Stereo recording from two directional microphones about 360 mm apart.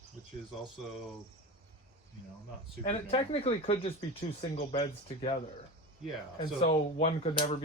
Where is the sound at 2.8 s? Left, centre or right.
Centre.